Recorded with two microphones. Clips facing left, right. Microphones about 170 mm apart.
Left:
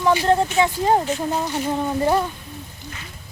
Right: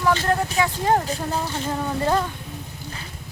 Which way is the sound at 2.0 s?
15° left (ahead or behind).